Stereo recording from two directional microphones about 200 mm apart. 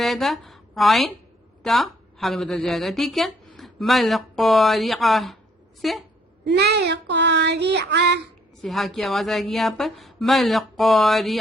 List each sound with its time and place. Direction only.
0.0 s a woman's voice: centre (ahead or behind)
6.4 s child singing: 55° right (ahead or behind)
8.6 s a woman's voice: centre (ahead or behind)